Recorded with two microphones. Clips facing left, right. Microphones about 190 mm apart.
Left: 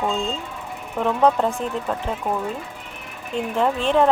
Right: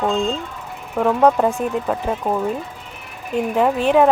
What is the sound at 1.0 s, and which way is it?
Speech, 10° right (ahead or behind).